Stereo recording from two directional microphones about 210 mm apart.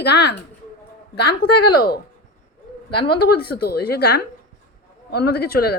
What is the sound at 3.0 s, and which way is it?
A woman's voice, 50° left (ahead or behind).